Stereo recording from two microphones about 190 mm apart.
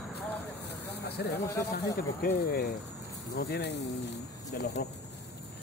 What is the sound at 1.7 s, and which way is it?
Speech, 55° left (ahead or behind).